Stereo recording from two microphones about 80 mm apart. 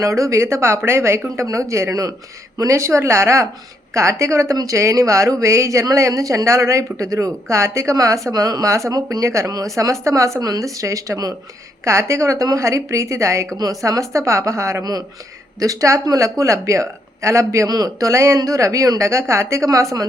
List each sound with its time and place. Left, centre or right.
0.0 s speech: right
17.7 s speech: right